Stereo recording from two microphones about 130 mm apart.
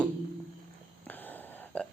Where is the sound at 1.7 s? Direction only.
10° left (ahead or behind).